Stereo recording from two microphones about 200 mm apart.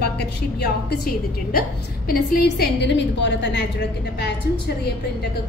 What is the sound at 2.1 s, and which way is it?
A woman's voice, 50° left (ahead or behind).